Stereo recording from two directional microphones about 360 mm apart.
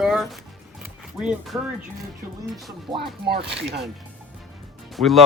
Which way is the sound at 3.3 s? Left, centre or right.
Right.